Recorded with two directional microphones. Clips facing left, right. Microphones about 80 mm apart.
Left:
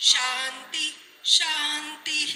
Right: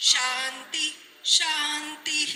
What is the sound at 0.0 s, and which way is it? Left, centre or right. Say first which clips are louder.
Music: even; right.